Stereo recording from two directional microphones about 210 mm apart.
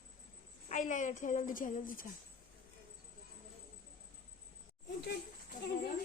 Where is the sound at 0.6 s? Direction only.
35° left (ahead or behind).